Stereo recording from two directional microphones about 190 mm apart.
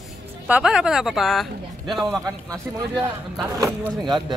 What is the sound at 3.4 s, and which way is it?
Speech, 20° right (ahead or behind).